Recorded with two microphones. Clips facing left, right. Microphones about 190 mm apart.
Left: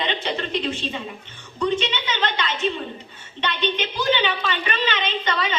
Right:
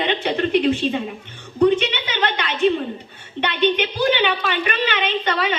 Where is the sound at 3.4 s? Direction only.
55° right (ahead or behind).